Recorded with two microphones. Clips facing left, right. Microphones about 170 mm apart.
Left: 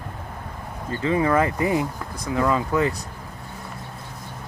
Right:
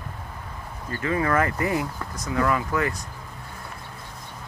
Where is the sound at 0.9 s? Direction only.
20° left (ahead or behind).